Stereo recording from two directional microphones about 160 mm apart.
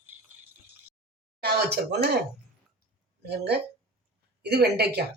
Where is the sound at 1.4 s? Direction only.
90° right.